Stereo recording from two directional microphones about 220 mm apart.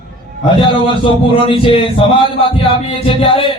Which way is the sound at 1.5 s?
25° left (ahead or behind).